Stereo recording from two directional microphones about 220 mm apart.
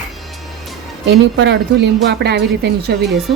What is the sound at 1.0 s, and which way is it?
Speech, 50° right (ahead or behind).